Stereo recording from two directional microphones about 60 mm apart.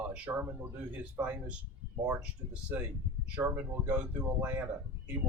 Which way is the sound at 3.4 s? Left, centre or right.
Right.